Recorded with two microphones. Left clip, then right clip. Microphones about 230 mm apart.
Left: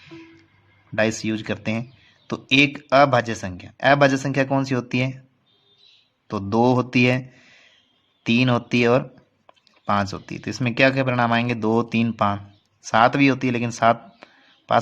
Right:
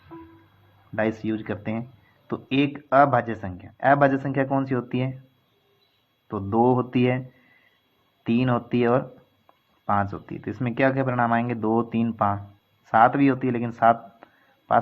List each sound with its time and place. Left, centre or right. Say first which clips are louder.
0.9 s speech: left 4 dB; left
6.2 s speech: left 2 dB; left